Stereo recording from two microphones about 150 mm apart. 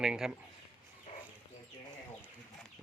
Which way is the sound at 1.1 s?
50° left (ahead or behind).